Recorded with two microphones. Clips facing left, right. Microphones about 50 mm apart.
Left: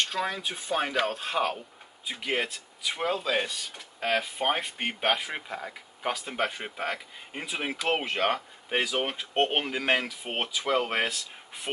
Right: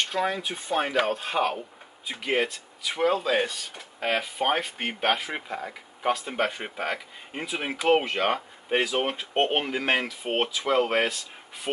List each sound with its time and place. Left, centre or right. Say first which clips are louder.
0.1 s speech: right 3 dB; centre